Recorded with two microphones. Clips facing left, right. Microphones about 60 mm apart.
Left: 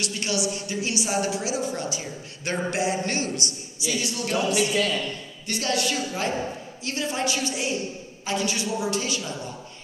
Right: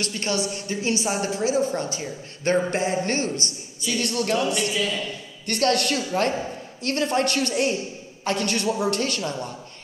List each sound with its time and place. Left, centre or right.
0.0 s a woman's voice: right